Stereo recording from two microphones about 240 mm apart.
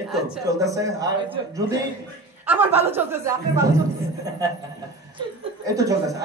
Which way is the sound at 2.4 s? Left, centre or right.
Centre.